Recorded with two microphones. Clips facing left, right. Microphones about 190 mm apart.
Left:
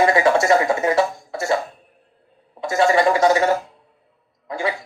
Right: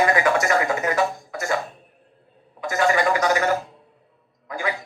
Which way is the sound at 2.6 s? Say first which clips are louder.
Left 4 dB; 30° left (ahead or behind).